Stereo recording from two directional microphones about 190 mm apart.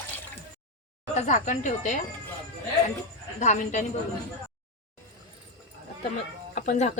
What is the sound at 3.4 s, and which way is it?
Speech, 40° left (ahead or behind).